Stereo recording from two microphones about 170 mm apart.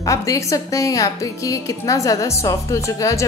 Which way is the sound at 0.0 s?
20° left (ahead or behind).